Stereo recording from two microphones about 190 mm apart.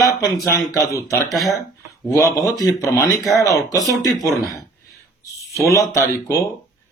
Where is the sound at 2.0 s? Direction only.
15° left (ahead or behind).